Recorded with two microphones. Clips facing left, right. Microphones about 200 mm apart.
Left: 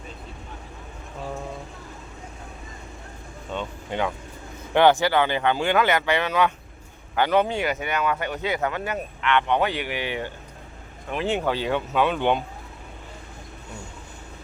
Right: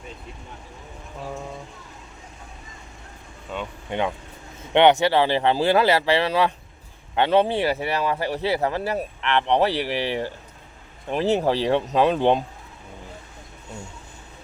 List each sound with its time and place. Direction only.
3.5 s speech: 5° right (ahead or behind)
3.8 s speech: 20° right (ahead or behind)